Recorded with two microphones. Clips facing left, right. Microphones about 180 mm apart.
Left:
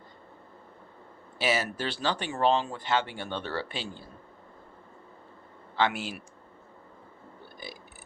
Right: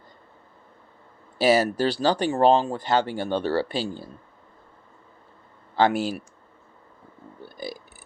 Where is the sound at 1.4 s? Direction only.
40° right (ahead or behind).